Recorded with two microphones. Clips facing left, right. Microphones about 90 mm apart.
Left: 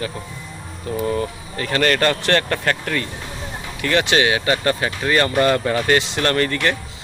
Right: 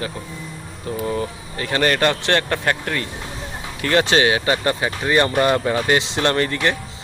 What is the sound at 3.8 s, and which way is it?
Speech, 35° right (ahead or behind).